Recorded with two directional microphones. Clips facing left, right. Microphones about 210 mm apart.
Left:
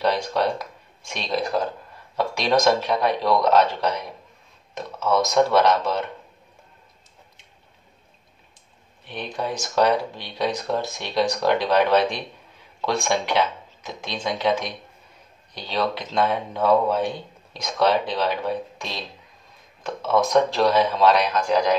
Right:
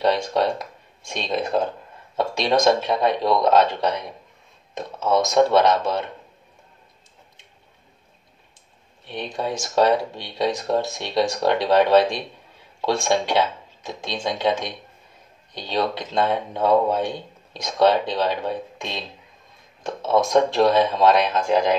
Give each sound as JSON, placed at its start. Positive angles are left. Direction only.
{"t": 0.0, "sound": "speech", "side_deg": -25}
{"t": 9.0, "sound": "speech", "side_deg": -20}
{"t": 15.5, "sound": "speech", "side_deg": -20}